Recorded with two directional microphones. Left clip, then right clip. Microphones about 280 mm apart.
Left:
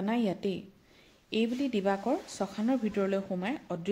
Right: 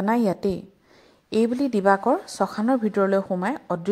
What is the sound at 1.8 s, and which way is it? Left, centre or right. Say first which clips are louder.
Speech: right 13 dB; right.